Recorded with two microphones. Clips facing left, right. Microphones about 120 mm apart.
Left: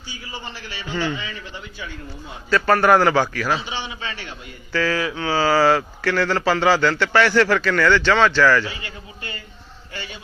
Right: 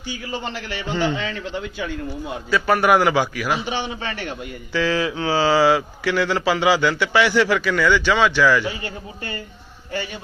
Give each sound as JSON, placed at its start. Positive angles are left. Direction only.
{"t": 0.1, "sound": "a man's voice", "side_deg": -70}
{"t": 2.5, "sound": "speech", "side_deg": -10}
{"t": 3.6, "sound": "a man's voice", "side_deg": -50}
{"t": 4.7, "sound": "speech", "side_deg": -20}
{"t": 8.8, "sound": "a man's voice", "side_deg": -40}